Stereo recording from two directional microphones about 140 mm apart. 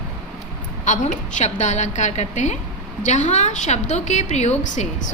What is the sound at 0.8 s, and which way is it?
A woman's voice, 60° left (ahead or behind).